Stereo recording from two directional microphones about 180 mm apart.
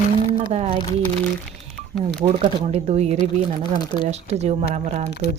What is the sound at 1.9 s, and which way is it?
Speech, 5° left (ahead or behind).